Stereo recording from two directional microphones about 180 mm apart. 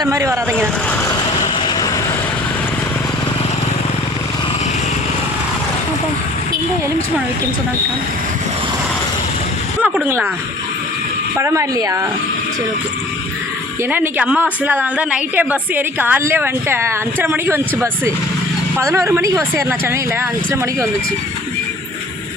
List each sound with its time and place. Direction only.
0.0 s a woman's voice: 15° right (ahead or behind)
9.8 s speech: 5° right (ahead or behind)
11.3 s a woman's voice: 15° right (ahead or behind)
13.9 s a woman's voice: 10° right (ahead or behind)
18.8 s a woman's voice: 15° right (ahead or behind)